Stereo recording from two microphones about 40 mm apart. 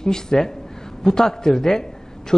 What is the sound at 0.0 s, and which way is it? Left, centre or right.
A man's voice, centre.